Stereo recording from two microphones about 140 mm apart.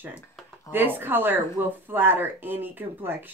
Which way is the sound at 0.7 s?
15° right (ahead or behind).